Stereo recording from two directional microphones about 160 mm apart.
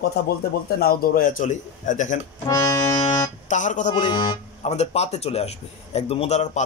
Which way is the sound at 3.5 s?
50° left (ahead or behind).